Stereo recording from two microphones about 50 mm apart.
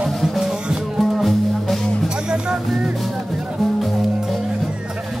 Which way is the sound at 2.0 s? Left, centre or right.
Centre.